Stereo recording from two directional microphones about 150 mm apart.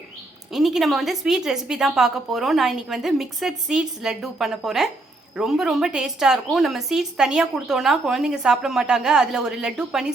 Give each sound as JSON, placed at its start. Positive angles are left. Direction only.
{"t": 0.5, "sound": "a woman's voice", "side_deg": 0}